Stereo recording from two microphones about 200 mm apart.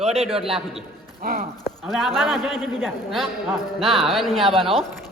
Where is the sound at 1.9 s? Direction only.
Centre (ahead or behind).